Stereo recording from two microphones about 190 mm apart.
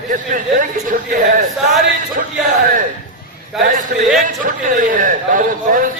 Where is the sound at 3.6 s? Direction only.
40° right (ahead or behind).